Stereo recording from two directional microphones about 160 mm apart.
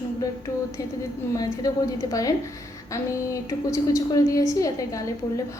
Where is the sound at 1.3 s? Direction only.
20° left (ahead or behind).